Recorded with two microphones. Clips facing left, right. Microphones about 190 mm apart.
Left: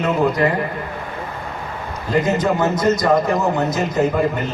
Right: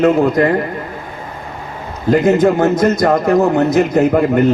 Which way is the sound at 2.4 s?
55° right (ahead or behind).